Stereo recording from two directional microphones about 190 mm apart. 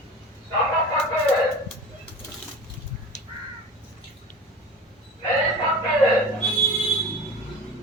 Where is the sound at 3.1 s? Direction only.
35° left (ahead or behind).